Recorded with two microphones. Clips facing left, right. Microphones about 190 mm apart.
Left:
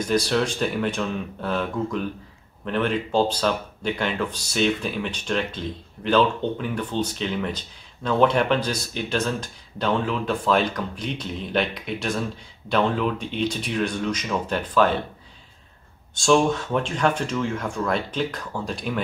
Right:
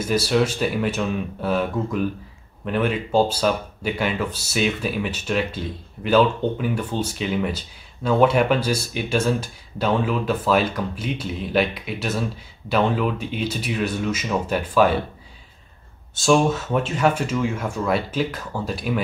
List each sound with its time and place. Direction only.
0.0 s speech: 5° right (ahead or behind)
16.2 s speech: 5° right (ahead or behind)